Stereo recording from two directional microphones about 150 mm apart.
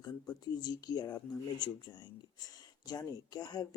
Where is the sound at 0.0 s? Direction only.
25° left (ahead or behind).